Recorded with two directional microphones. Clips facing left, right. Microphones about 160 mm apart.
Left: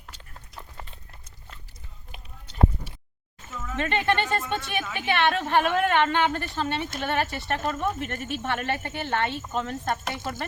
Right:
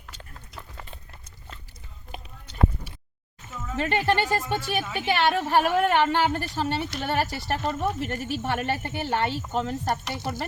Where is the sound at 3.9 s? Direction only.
10° right (ahead or behind).